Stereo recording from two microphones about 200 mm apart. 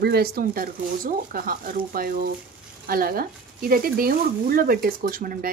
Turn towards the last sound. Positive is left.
turn(degrees=-45)  # may be behind; listen again after turning